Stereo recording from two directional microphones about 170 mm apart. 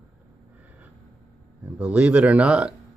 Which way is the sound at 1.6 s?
10° right (ahead or behind).